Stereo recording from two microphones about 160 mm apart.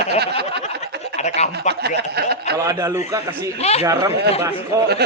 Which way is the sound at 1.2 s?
45° left (ahead or behind).